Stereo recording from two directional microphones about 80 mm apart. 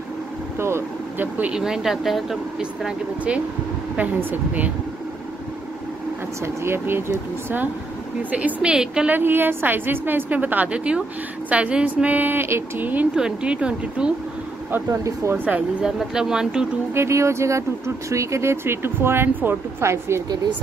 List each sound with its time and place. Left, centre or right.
0.6 s speech: right
1.5 s speech: centre
3.9 s a woman's voice: right
6.4 s speech: right
8.2 s speech: right
9.1 s a woman's voice: right
13.1 s speech: centre
14.9 s speech: right
15.3 s a woman's voice: right
15.8 s speech: centre
16.9 s speech: right